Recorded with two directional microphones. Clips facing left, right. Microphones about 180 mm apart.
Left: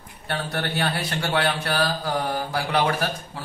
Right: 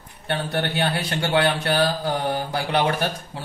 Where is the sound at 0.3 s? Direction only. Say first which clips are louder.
Right 3 dB; 25° right (ahead or behind).